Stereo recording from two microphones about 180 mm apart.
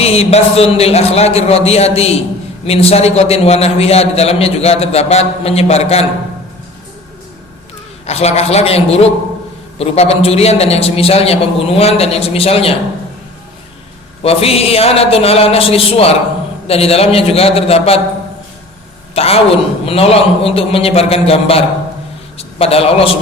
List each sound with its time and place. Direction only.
0.0 s a man's voice: 35° left (ahead or behind)
8.0 s a man's voice: 35° left (ahead or behind)
14.2 s a man's voice: 35° left (ahead or behind)
19.1 s a man's voice: 35° left (ahead or behind)